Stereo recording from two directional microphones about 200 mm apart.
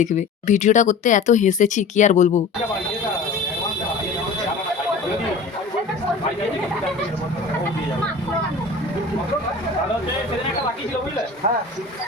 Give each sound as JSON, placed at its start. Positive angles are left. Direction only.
{"t": 0.0, "sound": "speech", "side_deg": 40}
{"t": 11.4, "sound": "speech", "side_deg": -35}